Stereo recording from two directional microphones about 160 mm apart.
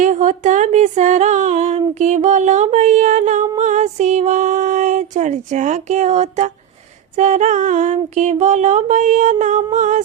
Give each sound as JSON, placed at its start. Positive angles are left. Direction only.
{"t": 0.0, "sound": "speech", "side_deg": -50}